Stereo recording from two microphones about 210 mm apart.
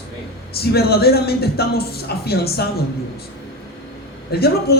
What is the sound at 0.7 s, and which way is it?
Speech, 50° left (ahead or behind).